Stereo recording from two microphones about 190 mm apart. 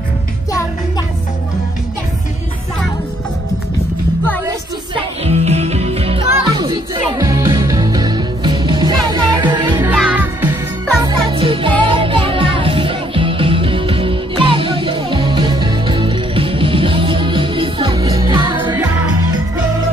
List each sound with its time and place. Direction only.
0.5 s music: 15° left (ahead or behind)
5.2 s music: 35° right (ahead or behind)
9.8 s music: 10° right (ahead or behind)